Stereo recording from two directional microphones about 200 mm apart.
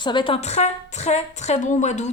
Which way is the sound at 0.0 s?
25° left (ahead or behind).